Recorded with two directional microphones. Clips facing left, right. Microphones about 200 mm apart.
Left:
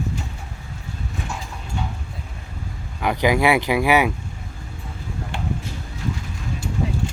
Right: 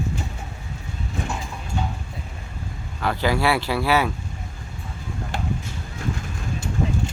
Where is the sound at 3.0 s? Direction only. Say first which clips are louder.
Left 3 dB; 15° left (ahead or behind).